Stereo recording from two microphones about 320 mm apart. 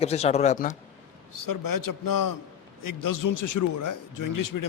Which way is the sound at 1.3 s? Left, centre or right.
Left.